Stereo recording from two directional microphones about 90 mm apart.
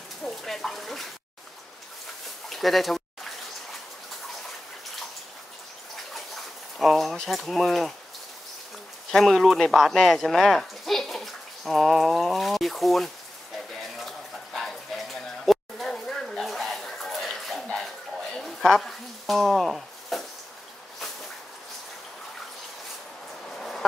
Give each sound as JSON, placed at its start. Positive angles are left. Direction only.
{"t": 0.2, "sound": "speech", "side_deg": 5}
{"t": 2.5, "sound": "speech", "side_deg": 0}
{"t": 6.1, "sound": "speech", "side_deg": 0}
{"t": 9.1, "sound": "speech", "side_deg": 0}
{"t": 13.9, "sound": "a sound", "side_deg": 0}
{"t": 18.4, "sound": "sizzle", "side_deg": 5}
{"t": 23.5, "sound": "a sound", "side_deg": 5}